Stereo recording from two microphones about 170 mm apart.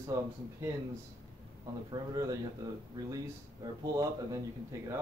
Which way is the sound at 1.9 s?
20° right (ahead or behind).